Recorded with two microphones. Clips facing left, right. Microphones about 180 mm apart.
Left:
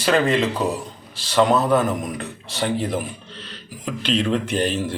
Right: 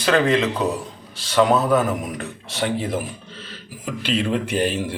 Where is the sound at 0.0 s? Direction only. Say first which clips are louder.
Even; centre (ahead or behind).